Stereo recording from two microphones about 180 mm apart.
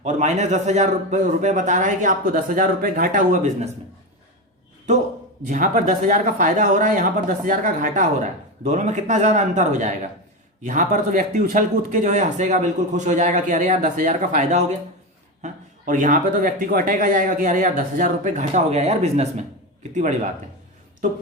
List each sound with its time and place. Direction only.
0.0 s speech: 40° right (ahead or behind)
5.5 s speech: 45° right (ahead or behind)